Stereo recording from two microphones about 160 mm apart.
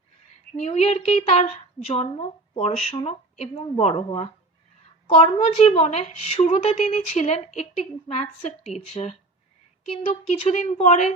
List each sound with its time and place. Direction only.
0.5 s a woman's voice: 40° left (ahead or behind)
10.5 s a woman's voice: 45° left (ahead or behind)